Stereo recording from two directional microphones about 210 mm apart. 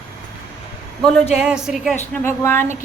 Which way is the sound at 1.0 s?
Centre (ahead or behind).